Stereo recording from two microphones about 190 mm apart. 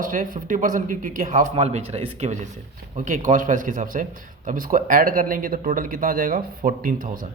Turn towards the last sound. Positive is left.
turn(degrees=-50)  # may be behind; listen again after turning